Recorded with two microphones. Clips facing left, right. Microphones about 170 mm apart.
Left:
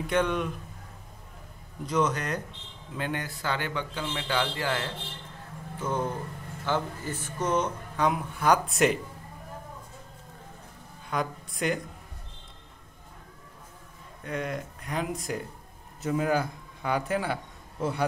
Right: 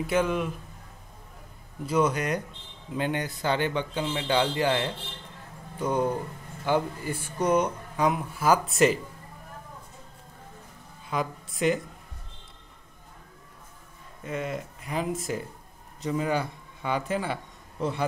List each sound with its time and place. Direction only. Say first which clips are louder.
0.0 s speech: right 1 dB; 5° right (ahead or behind)
1.9 s speech: right 2 dB; 10° right (ahead or behind)
11.1 s speech: right 1 dB; centre (ahead or behind)
14.2 s a man's voice: right 1 dB; 5° right (ahead or behind)